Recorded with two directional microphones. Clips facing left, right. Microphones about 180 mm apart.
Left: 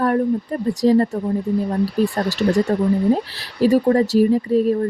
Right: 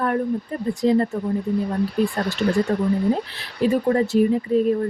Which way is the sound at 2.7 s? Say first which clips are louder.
Left 3 dB; 40° left (ahead or behind).